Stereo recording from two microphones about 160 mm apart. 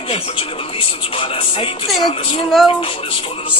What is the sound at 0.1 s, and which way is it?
Speech, 35° left (ahead or behind).